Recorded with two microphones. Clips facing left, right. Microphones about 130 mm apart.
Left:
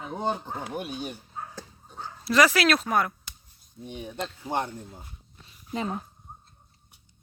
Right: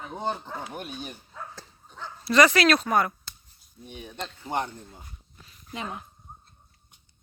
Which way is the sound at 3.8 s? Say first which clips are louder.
Left 3 dB; 10° left (ahead or behind).